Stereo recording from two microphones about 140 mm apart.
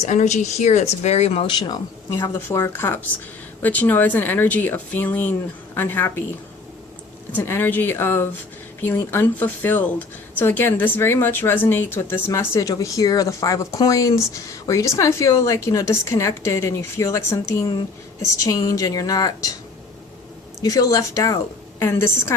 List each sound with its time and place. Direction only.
0.0 s speech: 55° left (ahead or behind)
1.5 s speech: 35° left (ahead or behind)
2.1 s speech: 20° left (ahead or behind)
7.3 s a woman's voice: 15° left (ahead or behind)
20.6 s a woman's voice: 25° left (ahead or behind)